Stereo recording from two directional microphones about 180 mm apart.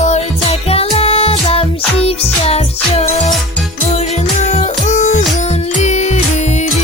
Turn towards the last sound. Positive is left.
turn(degrees=40)  # may be behind; listen again after turning